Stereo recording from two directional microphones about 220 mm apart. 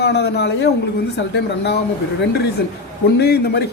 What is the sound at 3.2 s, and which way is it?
Speech, 45° left (ahead or behind).